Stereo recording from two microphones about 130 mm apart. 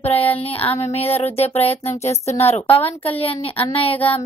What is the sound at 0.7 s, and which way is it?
Speech, 50° left (ahead or behind).